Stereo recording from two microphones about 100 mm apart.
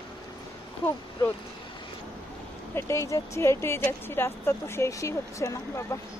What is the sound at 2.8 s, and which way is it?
Speech, 30° left (ahead or behind).